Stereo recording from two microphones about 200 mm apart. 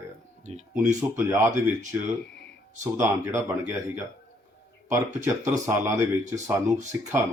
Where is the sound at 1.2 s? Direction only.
10° right (ahead or behind).